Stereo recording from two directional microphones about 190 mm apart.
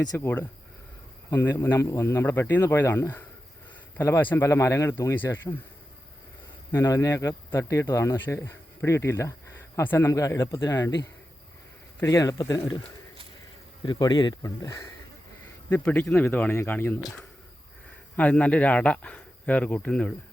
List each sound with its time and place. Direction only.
0.2 s speech: 10° left (ahead or behind)
6.7 s speech: 15° left (ahead or behind)
13.8 s speech: 20° left (ahead or behind)
18.2 s speech: 5° left (ahead or behind)